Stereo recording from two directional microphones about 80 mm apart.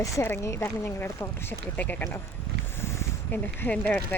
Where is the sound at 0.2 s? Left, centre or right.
Left.